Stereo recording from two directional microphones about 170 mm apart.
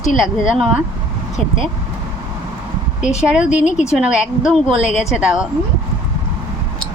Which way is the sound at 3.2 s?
5° right (ahead or behind).